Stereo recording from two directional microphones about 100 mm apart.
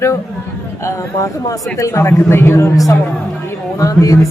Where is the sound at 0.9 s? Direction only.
30° left (ahead or behind).